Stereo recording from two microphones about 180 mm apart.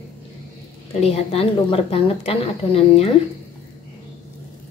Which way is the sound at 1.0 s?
35° left (ahead or behind).